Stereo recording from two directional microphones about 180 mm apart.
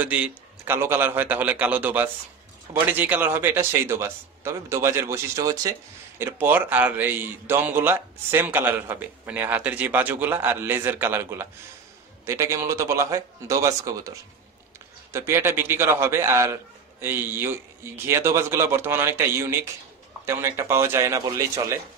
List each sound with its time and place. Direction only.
0.0 s a man's voice: 10° right (ahead or behind)
15.1 s a man's voice: 15° right (ahead or behind)